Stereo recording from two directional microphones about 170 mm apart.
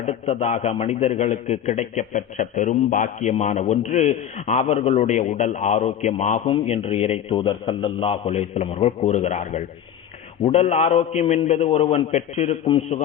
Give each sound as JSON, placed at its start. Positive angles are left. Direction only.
{"t": 0.0, "sound": "a man's voice", "side_deg": 40}